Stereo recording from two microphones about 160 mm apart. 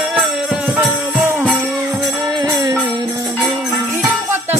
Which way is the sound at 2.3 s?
25° right (ahead or behind).